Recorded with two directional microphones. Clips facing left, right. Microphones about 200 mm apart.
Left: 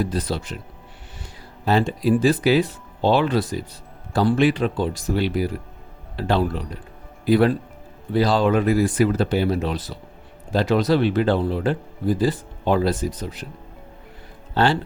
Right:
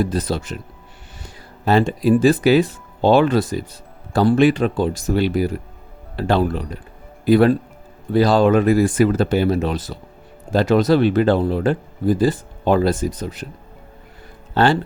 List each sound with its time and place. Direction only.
0.0 s speech: 45° right (ahead or behind)
1.6 s speech: 50° right (ahead or behind)
14.5 s speech: 50° right (ahead or behind)